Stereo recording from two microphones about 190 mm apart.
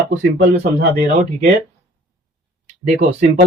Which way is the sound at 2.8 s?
40° right (ahead or behind).